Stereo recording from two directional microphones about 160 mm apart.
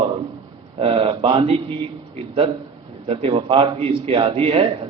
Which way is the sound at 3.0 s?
35° right (ahead or behind).